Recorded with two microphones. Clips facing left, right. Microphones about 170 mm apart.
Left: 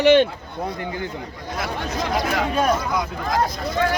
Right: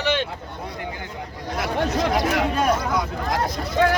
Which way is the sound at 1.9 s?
70° right (ahead or behind).